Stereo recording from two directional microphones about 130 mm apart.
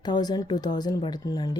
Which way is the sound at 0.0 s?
30° left (ahead or behind).